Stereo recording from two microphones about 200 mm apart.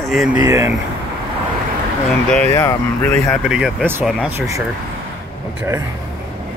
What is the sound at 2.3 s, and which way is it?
Speech, 10° left (ahead or behind).